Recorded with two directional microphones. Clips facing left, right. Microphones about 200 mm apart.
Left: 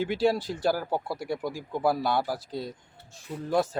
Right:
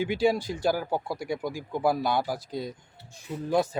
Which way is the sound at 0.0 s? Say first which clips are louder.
Even; centre (ahead or behind).